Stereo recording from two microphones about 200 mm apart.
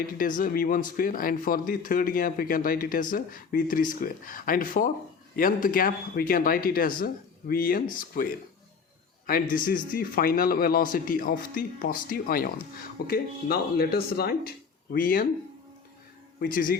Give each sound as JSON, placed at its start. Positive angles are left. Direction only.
{"t": 0.2, "sound": "speech", "side_deg": 45}
{"t": 16.4, "sound": "speech", "side_deg": 45}